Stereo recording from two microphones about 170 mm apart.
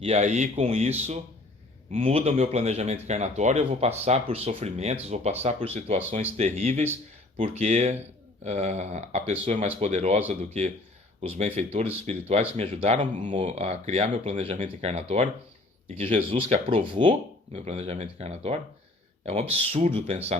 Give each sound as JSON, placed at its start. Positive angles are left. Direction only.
{"t": 0.0, "sound": "speech", "side_deg": -40}